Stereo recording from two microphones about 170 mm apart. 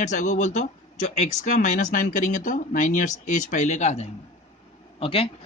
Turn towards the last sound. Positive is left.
turn(degrees=30)  # may be behind; listen again after turning